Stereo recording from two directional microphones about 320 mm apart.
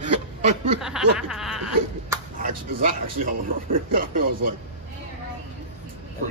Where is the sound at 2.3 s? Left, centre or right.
Right.